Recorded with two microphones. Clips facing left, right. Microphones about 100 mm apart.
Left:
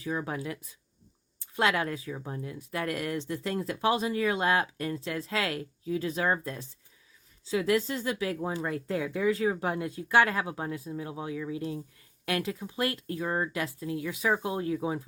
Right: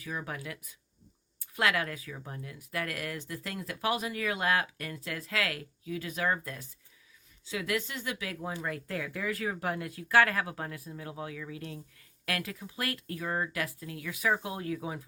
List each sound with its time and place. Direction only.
0.0 s speech: 30° left (ahead or behind)